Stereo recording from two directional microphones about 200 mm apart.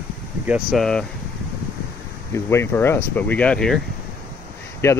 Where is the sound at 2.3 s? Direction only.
15° left (ahead or behind).